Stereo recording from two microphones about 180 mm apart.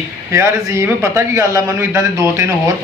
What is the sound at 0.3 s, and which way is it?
A man's voice, 15° right (ahead or behind).